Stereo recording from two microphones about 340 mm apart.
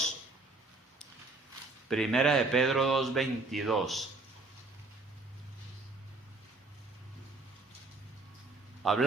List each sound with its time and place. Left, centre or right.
1.9 s speech: centre
8.8 s a man's voice: centre